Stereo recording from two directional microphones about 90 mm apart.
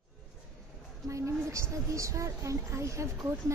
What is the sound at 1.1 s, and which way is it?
Speech, 35° right (ahead or behind).